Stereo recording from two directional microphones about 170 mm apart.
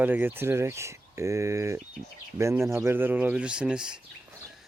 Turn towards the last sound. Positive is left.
turn(degrees=-5)  # may be behind; listen again after turning